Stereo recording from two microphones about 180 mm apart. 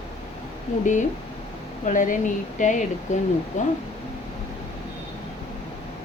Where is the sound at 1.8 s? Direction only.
45° left (ahead or behind).